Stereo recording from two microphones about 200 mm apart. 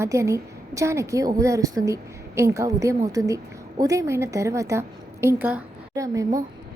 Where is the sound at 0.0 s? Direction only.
15° right (ahead or behind).